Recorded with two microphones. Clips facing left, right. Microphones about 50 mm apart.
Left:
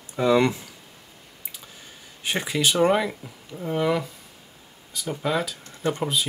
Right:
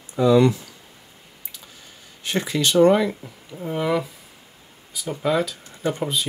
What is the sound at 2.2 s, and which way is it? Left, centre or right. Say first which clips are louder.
Speech: right 1 dB; centre.